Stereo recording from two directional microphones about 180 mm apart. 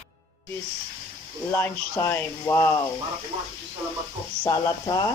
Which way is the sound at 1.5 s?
15° left (ahead or behind).